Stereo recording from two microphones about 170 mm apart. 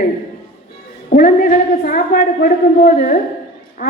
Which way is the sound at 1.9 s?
60° left (ahead or behind).